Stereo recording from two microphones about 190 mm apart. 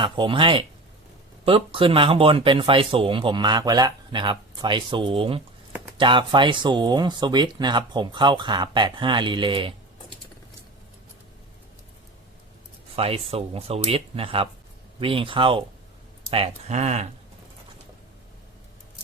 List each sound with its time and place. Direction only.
0.0 s speech: 25° right (ahead or behind)
13.0 s speech: 30° right (ahead or behind)